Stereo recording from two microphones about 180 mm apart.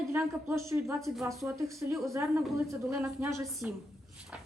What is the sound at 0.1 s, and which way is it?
A woman's voice, 10° right (ahead or behind).